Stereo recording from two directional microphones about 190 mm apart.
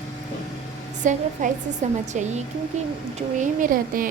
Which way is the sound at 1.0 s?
40° right (ahead or behind).